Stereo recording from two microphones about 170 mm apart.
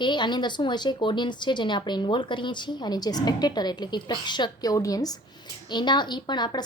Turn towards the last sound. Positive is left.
turn(degrees=25)  # may be behind; listen again after turning